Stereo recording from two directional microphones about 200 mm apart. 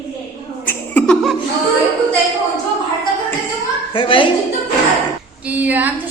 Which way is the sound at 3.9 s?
25° left (ahead or behind).